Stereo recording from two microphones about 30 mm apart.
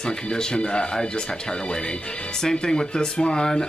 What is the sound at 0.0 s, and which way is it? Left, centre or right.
Speech, left.